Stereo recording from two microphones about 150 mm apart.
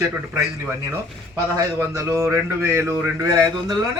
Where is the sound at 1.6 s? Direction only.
20° right (ahead or behind).